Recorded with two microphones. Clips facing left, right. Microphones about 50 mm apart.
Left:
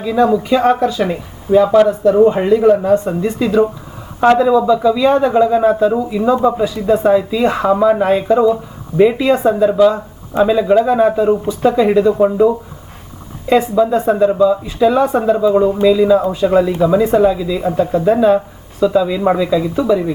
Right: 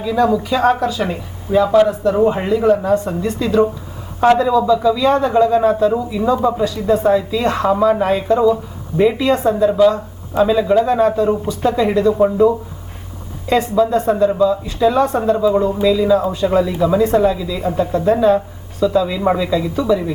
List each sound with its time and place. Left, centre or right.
0.0 s speech: left
0.6 s speech: left
2.6 s speech: left
3.4 s a woman's voice: centre